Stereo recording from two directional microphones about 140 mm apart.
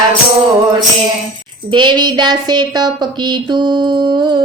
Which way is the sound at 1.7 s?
35° right (ahead or behind).